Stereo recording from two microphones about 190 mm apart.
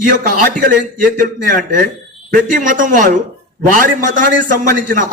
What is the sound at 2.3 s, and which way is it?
A man's voice, 45° right (ahead or behind).